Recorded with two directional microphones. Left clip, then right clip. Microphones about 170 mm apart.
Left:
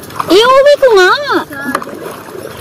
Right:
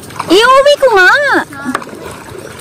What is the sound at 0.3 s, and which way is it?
Speech, 45° right (ahead or behind).